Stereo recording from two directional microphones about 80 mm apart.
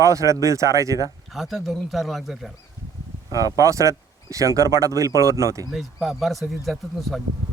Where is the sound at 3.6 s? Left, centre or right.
Right.